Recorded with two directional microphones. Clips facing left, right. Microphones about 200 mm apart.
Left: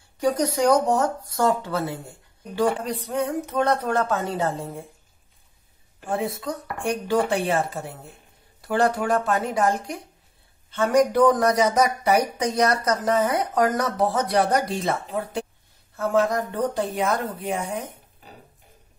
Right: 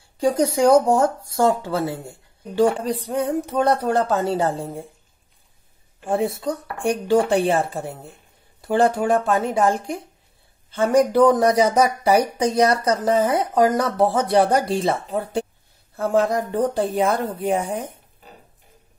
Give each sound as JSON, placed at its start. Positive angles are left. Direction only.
{"t": 0.2, "sound": "speech", "side_deg": -25}
{"t": 6.4, "sound": "speech", "side_deg": -30}
{"t": 10.7, "sound": "speech", "side_deg": -30}